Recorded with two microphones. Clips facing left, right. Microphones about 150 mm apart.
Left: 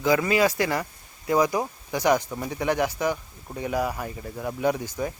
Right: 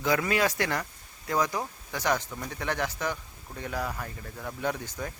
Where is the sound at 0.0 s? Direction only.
Centre (ahead or behind).